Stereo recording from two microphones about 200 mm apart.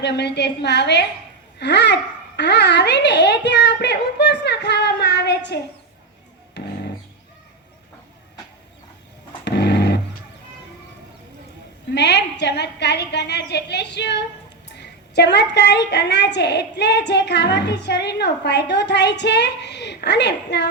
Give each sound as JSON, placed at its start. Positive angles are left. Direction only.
{"t": 0.0, "sound": "a woman's voice", "side_deg": 55}
{"t": 9.4, "sound": "a sound", "side_deg": 55}
{"t": 11.9, "sound": "a woman's voice", "side_deg": 55}